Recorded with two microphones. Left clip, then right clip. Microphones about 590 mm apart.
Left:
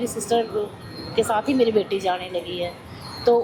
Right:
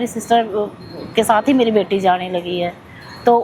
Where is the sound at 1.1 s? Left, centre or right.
Right.